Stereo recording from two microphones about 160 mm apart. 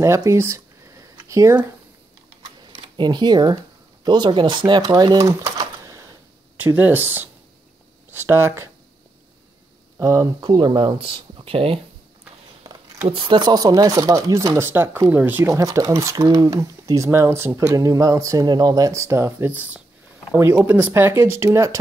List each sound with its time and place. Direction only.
0.0 s speech: 20° right (ahead or behind)
1.1 s a sound: 20° right (ahead or behind)
2.7 s speech: 25° right (ahead or behind)
6.6 s speech: 10° right (ahead or behind)
9.9 s speech: 20° right (ahead or behind); by 11.8 s 35° right (ahead or behind)
13.1 s speech: 30° right (ahead or behind)